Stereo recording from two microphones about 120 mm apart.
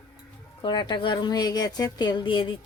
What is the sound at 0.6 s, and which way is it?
Speech, 40° left (ahead or behind).